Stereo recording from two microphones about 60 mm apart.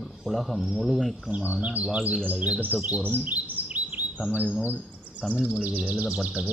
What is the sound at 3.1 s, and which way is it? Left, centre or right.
Chirp, right.